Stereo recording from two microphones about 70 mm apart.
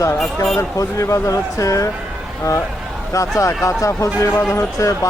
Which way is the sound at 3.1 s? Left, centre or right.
Left.